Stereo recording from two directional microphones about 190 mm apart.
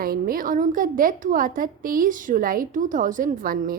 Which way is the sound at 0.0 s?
50° right (ahead or behind).